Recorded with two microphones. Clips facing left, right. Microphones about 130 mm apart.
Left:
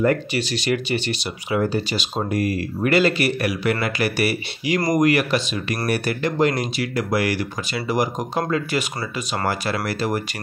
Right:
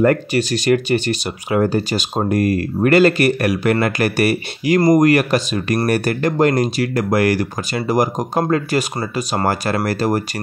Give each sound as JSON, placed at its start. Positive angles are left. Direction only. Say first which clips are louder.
{"t": 0.0, "sound": "speech", "louder": "right 5 dB", "side_deg": -50}